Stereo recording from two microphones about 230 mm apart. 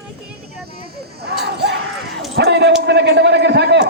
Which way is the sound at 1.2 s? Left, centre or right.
Right.